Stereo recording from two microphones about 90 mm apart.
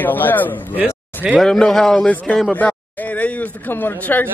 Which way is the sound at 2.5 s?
15° left (ahead or behind).